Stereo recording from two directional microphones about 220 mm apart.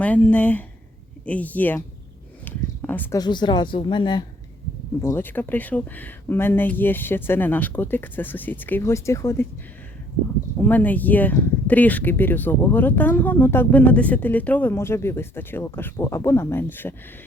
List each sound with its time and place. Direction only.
0.0 s speech: 5° left (ahead or behind)
5.0 s speech: 10° left (ahead or behind)
10.6 s speech: 5° left (ahead or behind)